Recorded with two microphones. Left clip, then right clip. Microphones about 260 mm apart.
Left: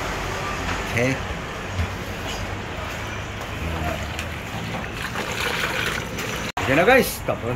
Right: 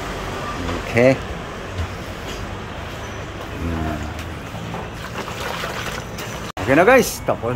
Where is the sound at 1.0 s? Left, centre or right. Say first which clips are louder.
Right 9 dB; centre.